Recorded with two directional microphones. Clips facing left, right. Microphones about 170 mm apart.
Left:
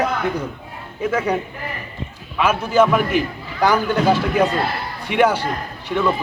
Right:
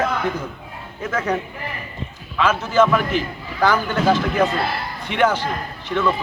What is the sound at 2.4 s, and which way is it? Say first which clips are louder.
A man's voice: left 1 dB; 10° left (ahead or behind).